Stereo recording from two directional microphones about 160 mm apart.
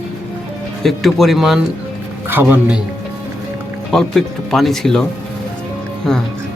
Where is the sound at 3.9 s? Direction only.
Centre (ahead or behind).